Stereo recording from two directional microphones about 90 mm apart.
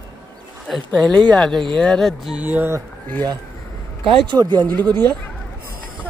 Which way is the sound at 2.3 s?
20° right (ahead or behind).